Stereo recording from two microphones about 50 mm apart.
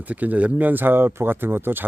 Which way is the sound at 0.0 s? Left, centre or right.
Right.